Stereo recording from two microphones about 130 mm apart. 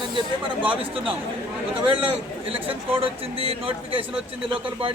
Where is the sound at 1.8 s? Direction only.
40° right (ahead or behind).